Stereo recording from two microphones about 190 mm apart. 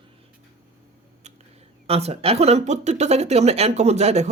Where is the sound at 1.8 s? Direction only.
30° right (ahead or behind).